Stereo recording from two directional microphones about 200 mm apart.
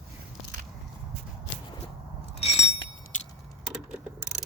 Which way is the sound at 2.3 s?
30° left (ahead or behind).